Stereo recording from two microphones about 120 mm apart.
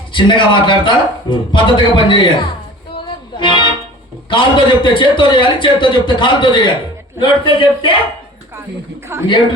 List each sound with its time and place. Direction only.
0.1 s a man's voice: 40° left (ahead or behind)
3.3 s music: 40° left (ahead or behind)
4.3 s a man's voice: 40° left (ahead or behind)
9.1 s a woman's voice: 20° right (ahead or behind)